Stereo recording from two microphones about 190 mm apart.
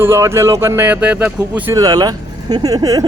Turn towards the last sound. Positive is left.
turn(degrees=-20)  # may be behind; listen again after turning